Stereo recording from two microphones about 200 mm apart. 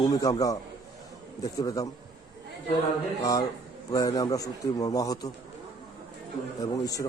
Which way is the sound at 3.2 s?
20° left (ahead or behind).